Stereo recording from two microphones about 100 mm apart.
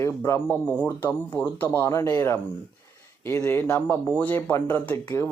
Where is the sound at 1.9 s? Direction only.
30° left (ahead or behind).